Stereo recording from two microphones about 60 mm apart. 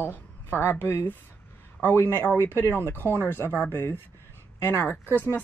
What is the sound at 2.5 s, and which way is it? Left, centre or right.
Speech, left.